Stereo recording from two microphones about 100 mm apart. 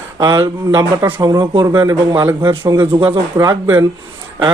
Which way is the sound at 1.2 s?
40° right (ahead or behind).